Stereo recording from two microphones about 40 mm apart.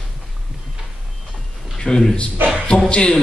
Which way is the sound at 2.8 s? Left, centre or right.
Left.